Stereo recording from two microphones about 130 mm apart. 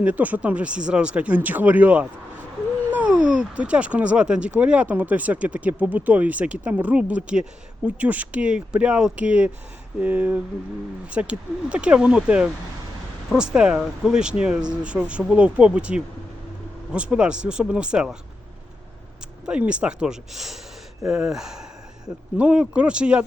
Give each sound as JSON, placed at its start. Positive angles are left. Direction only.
{"t": 0.0, "sound": "speech", "side_deg": -10}
{"t": 19.5, "sound": "speech", "side_deg": -10}